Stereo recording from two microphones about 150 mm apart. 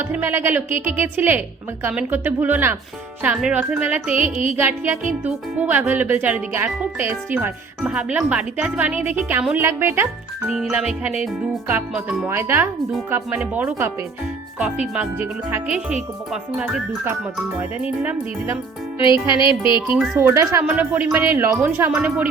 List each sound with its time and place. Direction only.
0.0 s speech: 15° right (ahead or behind)
10.4 s speech: 5° right (ahead or behind)
19.3 s music: 30° left (ahead or behind)
20.1 s speech: 20° right (ahead or behind)